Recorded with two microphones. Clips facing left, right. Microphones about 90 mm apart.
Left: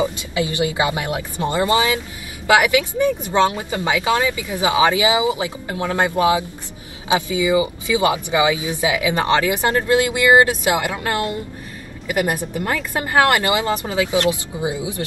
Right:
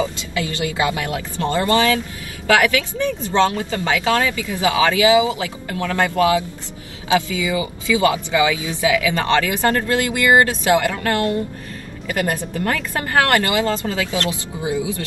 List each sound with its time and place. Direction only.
0.0 s speech: 20° left (ahead or behind)